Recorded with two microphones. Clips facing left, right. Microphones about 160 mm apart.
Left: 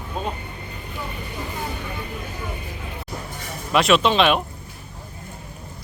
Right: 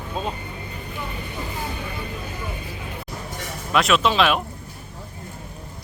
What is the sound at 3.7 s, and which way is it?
Speech, centre (ahead or behind).